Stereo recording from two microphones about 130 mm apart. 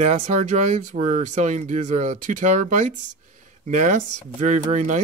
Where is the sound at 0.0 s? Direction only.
60° right (ahead or behind).